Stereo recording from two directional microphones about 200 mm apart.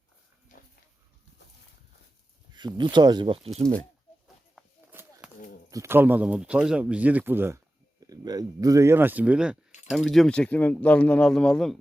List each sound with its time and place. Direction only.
2.5 s speech: 20° right (ahead or behind)
4.9 s a sound: 10° right (ahead or behind)
5.7 s speech: 15° right (ahead or behind); by 11.8 s 5° left (ahead or behind)